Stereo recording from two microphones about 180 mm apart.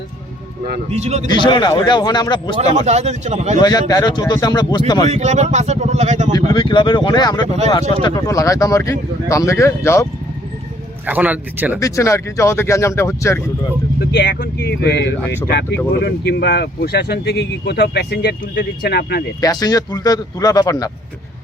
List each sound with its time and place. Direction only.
0.9 s speech: 40° right (ahead or behind)
1.3 s speech: 25° left (ahead or behind)
2.7 s speech: 40° right (ahead or behind)
3.6 s speech: 20° left (ahead or behind)
5.0 s speech: 40° right (ahead or behind)
6.3 s speech: 30° left (ahead or behind)
7.4 s speech: 35° right (ahead or behind)
7.7 s speech: 25° left (ahead or behind)
11.0 s speech: 10° right (ahead or behind)
11.8 s speech: 15° left (ahead or behind)
14.0 s speech: 60° left (ahead or behind)
19.4 s speech: 20° left (ahead or behind)